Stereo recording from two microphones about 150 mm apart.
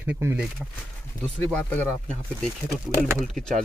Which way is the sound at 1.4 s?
10° left (ahead or behind).